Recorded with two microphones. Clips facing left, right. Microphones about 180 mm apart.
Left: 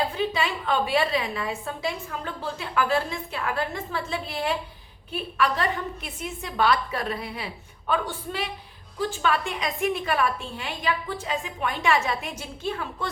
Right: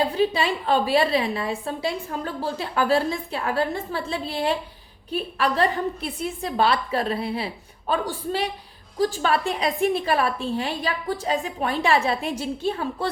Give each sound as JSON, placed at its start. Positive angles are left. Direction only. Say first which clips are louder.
{"t": 0.1, "sound": "a woman's voice", "louder": "right 5 dB", "side_deg": -35}